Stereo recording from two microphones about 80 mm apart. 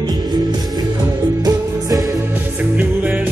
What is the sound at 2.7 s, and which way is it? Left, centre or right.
Music, right.